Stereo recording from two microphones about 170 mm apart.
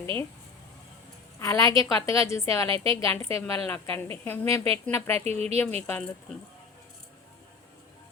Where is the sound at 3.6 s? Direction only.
10° left (ahead or behind).